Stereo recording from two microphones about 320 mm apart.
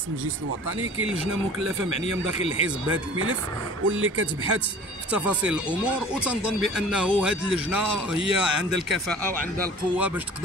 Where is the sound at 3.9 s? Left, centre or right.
Right.